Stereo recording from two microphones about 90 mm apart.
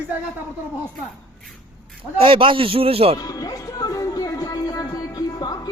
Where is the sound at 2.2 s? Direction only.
85° right.